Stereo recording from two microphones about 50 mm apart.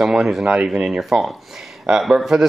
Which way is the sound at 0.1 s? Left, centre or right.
Centre.